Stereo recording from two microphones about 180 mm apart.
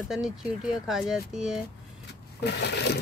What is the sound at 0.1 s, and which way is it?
Speech, 5° right (ahead or behind).